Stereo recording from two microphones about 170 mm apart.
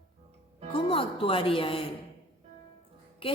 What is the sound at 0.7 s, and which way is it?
Speech, 30° left (ahead or behind).